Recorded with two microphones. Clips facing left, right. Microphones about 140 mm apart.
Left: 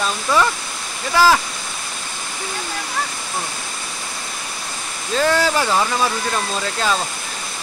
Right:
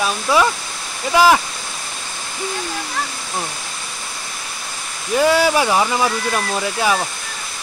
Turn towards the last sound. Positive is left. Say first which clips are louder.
# right 2 dB
turn(degrees=-15)  # may be behind; listen again after turning